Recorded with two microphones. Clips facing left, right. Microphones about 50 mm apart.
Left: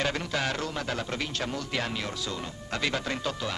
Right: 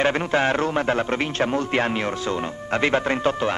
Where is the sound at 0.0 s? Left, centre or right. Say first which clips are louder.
Right 9 dB; right.